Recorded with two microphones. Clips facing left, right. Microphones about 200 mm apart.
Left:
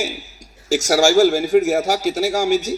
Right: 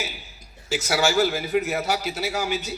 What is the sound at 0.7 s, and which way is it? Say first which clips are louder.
A man's voice: left 8 dB; 45° left (ahead or behind).